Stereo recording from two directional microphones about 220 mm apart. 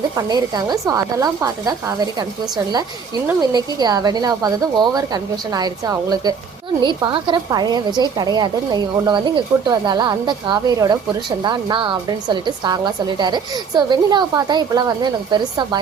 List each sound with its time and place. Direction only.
0.2 s a woman's voice: 20° right (ahead or behind)
3.2 s a woman's voice: 20° right (ahead or behind)